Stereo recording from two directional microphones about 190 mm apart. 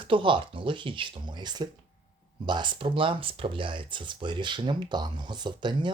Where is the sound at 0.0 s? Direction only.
25° right (ahead or behind).